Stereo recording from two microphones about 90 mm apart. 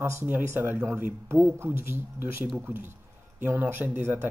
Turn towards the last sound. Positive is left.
turn(degrees=-25)  # may be behind; listen again after turning